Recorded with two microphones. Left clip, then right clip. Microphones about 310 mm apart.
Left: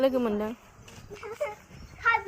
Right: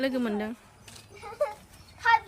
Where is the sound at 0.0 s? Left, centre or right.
Centre.